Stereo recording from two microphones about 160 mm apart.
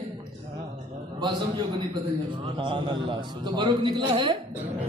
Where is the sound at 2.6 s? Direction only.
30° right (ahead or behind).